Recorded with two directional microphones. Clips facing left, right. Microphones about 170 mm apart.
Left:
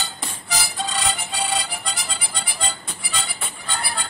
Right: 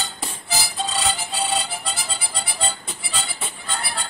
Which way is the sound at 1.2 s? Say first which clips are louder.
Right 1 dB; 30° right (ahead or behind).